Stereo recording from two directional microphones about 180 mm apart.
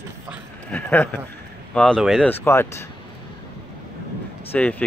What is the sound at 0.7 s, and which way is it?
Speech, 10° left (ahead or behind).